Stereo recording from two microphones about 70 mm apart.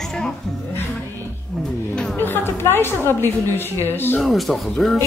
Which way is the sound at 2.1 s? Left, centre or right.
Left.